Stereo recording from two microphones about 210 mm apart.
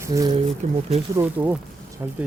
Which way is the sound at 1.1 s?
10° right (ahead or behind).